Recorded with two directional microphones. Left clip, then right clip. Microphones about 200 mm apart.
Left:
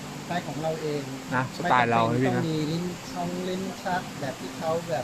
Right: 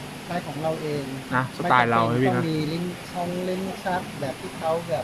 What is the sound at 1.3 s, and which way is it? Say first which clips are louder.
Speech: right 3 dB; 5° right (ahead or behind).